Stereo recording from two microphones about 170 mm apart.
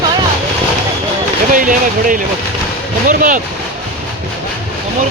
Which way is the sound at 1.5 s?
50° right (ahead or behind).